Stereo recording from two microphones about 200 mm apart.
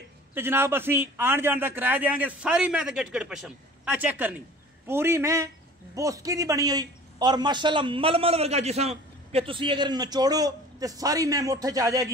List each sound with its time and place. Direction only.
0.3 s a man's voice: 10° right (ahead or behind)